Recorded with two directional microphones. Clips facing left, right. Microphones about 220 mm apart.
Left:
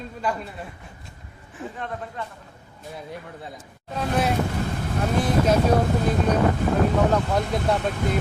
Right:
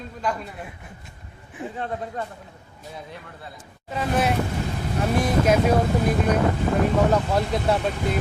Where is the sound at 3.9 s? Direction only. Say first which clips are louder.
Right 1 dB; centre (ahead or behind).